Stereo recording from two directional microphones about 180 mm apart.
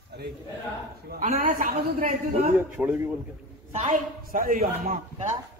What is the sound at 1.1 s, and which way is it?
A man's voice, 50° right (ahead or behind).